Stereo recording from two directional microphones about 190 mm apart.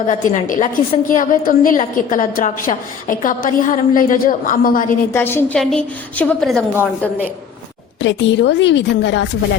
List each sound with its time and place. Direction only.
0.1 s a woman's voice: 45° left (ahead or behind)
5.1 s a woman's voice: 10° left (ahead or behind)
8.0 s a woman's voice: 70° left (ahead or behind)